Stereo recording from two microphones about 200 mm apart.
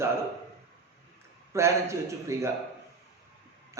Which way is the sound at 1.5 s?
15° right (ahead or behind).